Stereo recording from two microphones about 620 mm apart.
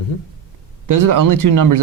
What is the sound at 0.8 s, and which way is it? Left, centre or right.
Speech, right.